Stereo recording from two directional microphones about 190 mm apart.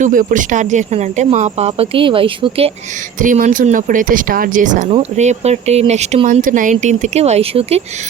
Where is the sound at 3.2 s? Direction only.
45° right (ahead or behind).